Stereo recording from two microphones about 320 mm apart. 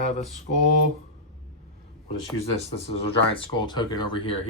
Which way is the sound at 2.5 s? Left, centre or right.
Centre.